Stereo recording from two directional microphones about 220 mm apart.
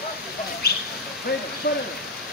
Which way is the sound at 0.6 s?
45° left (ahead or behind).